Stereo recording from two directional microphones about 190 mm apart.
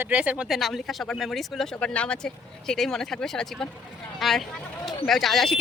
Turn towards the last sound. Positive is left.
turn(degrees=0)  # may be behind; listen again after turning